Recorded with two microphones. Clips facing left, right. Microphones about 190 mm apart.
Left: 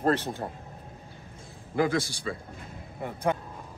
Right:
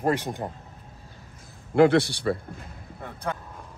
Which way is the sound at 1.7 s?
70° right (ahead or behind).